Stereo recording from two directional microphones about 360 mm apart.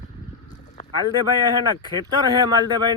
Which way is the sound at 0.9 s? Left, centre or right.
Centre.